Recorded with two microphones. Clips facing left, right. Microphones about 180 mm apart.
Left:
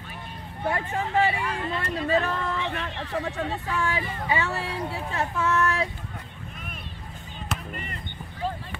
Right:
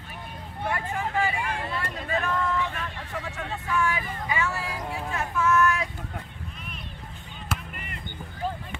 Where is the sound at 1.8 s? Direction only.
35° left (ahead or behind).